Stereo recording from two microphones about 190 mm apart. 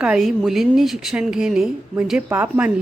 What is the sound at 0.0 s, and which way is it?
A woman's voice, 5° right (ahead or behind).